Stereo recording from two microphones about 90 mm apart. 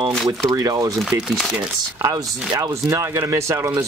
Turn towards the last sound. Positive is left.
turn(degrees=-35)  # may be behind; listen again after turning